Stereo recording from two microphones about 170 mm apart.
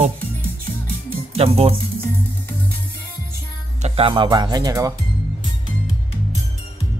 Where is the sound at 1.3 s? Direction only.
35° right (ahead or behind).